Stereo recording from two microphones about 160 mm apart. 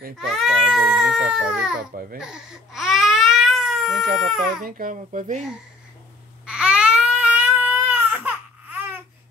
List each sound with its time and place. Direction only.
0.2 s speech: centre (ahead or behind)
2.1 s baby cry: 5° right (ahead or behind)
4.2 s speech: centre (ahead or behind)
4.6 s a child's voice: 60° right (ahead or behind)
6.4 s baby cry: 5° right (ahead or behind)